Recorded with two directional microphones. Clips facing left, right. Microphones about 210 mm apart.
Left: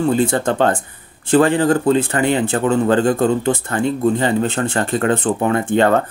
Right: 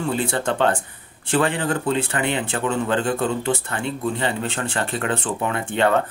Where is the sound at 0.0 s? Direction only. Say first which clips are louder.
Left 7 dB; 40° left (ahead or behind).